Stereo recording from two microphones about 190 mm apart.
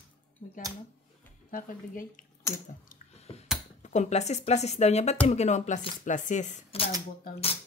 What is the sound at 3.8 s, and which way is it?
Speech, 35° left (ahead or behind).